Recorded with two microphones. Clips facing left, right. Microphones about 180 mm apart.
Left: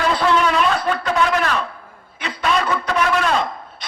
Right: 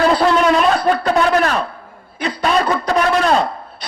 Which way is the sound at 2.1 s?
35° right (ahead or behind).